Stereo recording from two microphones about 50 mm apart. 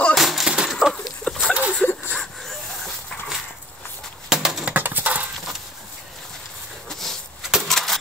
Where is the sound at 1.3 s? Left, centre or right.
Left.